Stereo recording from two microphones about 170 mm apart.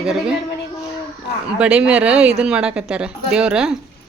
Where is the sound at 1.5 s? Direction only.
5° right (ahead or behind).